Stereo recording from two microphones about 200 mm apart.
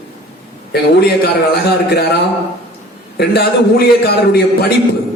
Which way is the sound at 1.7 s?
55° left (ahead or behind).